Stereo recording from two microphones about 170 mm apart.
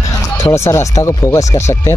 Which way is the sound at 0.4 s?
15° left (ahead or behind).